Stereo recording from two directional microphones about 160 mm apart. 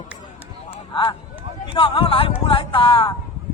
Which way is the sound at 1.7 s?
35° left (ahead or behind).